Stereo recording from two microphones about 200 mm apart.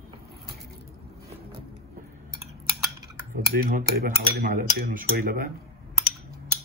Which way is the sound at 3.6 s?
45° right (ahead or behind).